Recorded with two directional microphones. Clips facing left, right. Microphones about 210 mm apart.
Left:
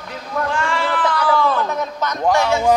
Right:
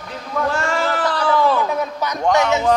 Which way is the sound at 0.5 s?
45° right (ahead or behind).